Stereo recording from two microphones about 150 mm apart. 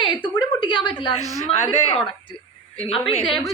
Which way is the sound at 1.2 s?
25° right (ahead or behind).